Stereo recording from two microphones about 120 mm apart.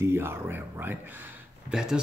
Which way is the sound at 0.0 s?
20° right (ahead or behind).